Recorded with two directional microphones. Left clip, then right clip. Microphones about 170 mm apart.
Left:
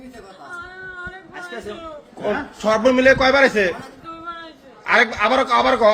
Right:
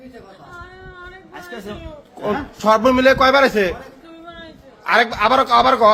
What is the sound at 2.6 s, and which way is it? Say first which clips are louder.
Speech: right 3 dB; 25° right (ahead or behind).